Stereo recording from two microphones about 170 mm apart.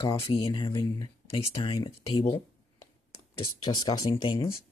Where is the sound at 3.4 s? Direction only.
25° left (ahead or behind).